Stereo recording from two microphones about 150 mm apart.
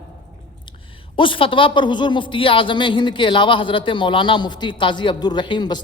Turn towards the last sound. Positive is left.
turn(degrees=30)  # may be behind; listen again after turning